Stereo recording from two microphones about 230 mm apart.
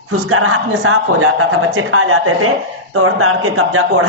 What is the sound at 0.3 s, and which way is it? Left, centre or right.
Speech, right.